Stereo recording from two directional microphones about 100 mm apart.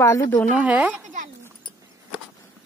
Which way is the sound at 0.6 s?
15° right (ahead or behind).